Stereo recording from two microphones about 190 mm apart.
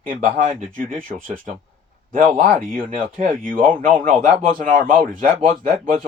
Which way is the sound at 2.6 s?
45° right (ahead or behind).